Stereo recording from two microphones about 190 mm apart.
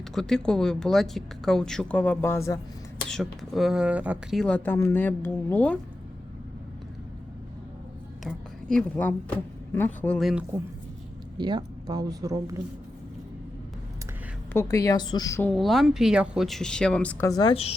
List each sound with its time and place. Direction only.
0.1 s speech: centre (ahead or behind)
3.1 s speech: centre (ahead or behind)
8.7 s speech: 10° left (ahead or behind)
10.2 s speech: centre (ahead or behind)
11.3 s speech: 25° right (ahead or behind)
14.5 s a woman's voice: 15° left (ahead or behind)
15.4 s speech: centre (ahead or behind); by 17.5 s 15° left (ahead or behind)
17.5 s a woman's voice: 30° left (ahead or behind)